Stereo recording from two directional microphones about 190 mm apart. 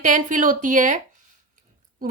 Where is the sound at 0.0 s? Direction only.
45° right (ahead or behind).